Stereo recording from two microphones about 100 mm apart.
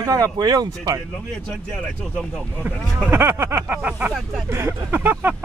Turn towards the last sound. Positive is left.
turn(degrees=-20)  # may be behind; listen again after turning